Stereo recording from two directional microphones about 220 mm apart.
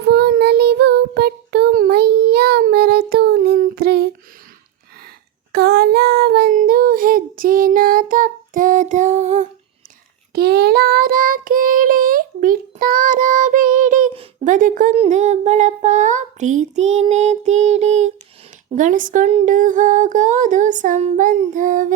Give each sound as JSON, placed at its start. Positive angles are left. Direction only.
{"t": 0.0, "sound": "child singing", "side_deg": -50}
{"t": 5.5, "sound": "child singing", "side_deg": -45}
{"t": 10.3, "sound": "child singing", "side_deg": -45}
{"t": 18.8, "sound": "a sound", "side_deg": -35}